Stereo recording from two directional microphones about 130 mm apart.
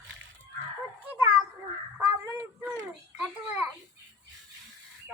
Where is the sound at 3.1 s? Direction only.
10° right (ahead or behind).